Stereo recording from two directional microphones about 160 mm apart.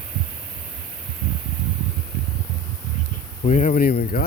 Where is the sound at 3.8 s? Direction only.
70° left (ahead or behind).